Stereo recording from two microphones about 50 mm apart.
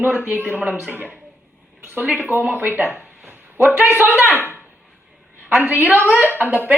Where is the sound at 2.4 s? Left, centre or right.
Right.